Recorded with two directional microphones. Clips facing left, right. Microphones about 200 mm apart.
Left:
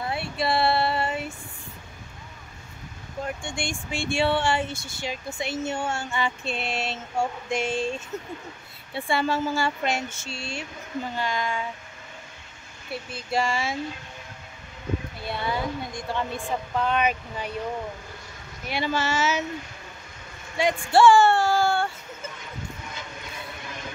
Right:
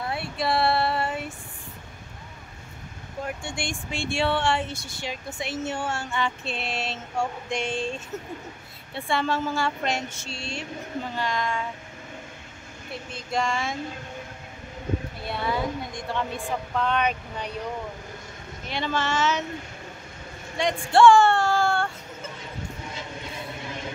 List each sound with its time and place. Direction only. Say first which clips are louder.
0.0 s female singing: left 1 dB; centre (ahead or behind)
3.3 s speech: left 1 dB; 5° right (ahead or behind)
12.9 s speech: left 2 dB; 5° left (ahead or behind)
15.2 s speech: right 1 dB; centre (ahead or behind)
18.7 s speech: left 1 dB; 10° left (ahead or behind)
20.6 s speech: left 2 dB; 5° left (ahead or behind)
20.9 s music: right 1 dB; 5° left (ahead or behind)
22.4 s vehicle: right 2 dB; 30° right (ahead or behind)